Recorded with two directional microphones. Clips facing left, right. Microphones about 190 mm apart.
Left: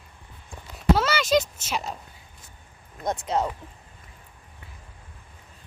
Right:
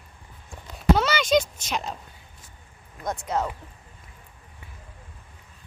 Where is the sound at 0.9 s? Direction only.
5° left (ahead or behind).